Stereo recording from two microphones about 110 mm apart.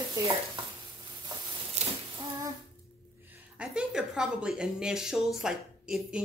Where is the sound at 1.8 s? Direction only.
90° right.